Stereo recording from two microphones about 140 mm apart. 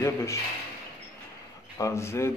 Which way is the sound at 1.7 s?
20° left (ahead or behind).